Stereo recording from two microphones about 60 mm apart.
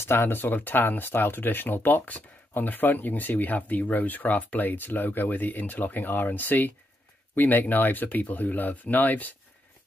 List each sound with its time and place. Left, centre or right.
0.0 s speech: left